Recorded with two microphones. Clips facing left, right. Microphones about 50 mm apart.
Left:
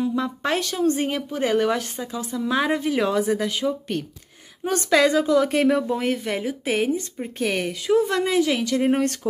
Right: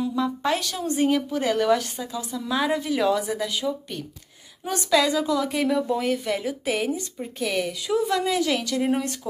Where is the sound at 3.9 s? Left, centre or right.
Left.